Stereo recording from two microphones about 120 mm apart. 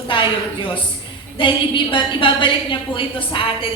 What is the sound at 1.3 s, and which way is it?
A woman's voice, 45° left (ahead or behind).